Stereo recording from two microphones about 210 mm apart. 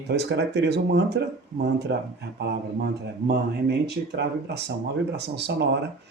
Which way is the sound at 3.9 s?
55° right (ahead or behind).